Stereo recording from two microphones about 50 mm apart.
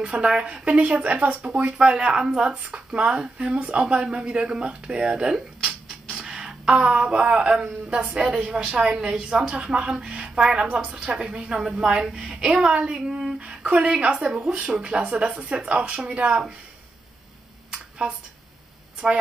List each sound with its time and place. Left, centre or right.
0.0 s speech: right
6.0 s a sound: centre
7.1 s a woman's voice: centre
12.4 s speech: right
13.1 s a sound: centre
13.7 s speech: right
14.7 s speech: centre
19.0 s speech: centre